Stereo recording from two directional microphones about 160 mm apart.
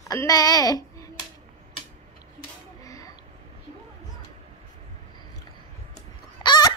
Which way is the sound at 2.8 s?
20° left (ahead or behind).